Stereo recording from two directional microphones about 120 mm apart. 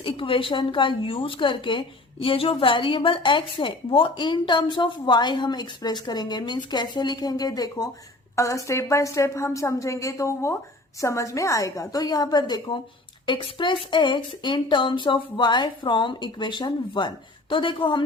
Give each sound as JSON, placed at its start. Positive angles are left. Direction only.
{"t": 0.0, "sound": "a woman's voice", "side_deg": 45}